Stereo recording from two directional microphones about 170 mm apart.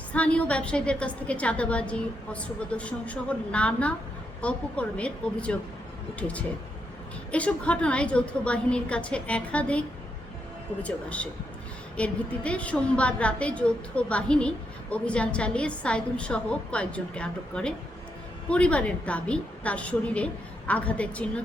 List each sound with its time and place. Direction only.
0.1 s a woman's voice: 5° left (ahead or behind)
10.8 s a woman's voice: 5° left (ahead or behind)